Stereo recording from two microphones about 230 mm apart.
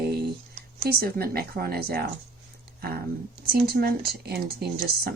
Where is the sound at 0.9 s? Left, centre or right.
Right.